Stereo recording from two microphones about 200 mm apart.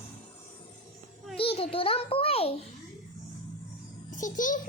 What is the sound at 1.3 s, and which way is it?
A child's voice, 30° left (ahead or behind).